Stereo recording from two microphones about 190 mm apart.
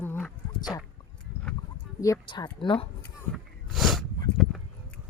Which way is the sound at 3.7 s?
Centre (ahead or behind).